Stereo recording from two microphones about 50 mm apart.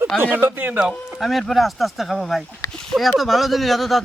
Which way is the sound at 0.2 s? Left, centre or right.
Right.